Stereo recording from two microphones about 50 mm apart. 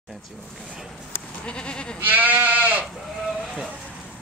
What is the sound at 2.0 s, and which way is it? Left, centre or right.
Goat, right.